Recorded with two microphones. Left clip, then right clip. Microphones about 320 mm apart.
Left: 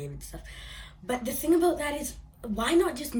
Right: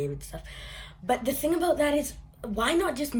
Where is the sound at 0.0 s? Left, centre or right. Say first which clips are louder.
Right 8 dB; centre.